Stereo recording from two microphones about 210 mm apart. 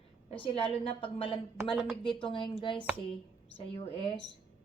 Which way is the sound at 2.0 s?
25° left (ahead or behind).